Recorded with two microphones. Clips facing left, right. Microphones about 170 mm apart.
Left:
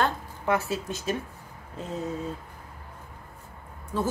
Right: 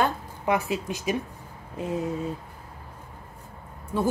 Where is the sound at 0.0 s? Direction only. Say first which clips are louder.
Right 2 dB; 15° right (ahead or behind).